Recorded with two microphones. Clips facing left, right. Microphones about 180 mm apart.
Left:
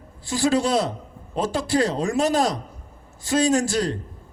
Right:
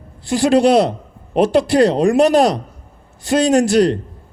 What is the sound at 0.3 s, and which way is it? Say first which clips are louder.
A man's voice: right 8 dB; 65° right (ahead or behind).